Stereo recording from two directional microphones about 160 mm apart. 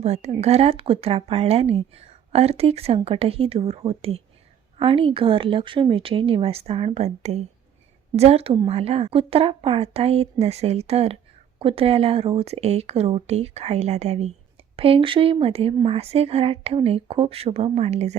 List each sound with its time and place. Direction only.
0.0 s speech: 45° right (ahead or behind)